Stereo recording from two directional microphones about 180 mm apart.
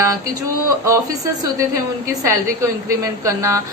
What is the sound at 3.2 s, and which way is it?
Speech, 15° right (ahead or behind).